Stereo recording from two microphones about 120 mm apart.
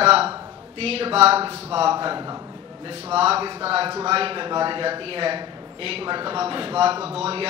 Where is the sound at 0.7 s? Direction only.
55° right (ahead or behind); by 2.9 s 35° right (ahead or behind).